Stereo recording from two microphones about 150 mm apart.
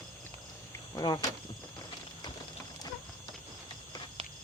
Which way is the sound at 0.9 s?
25° left (ahead or behind).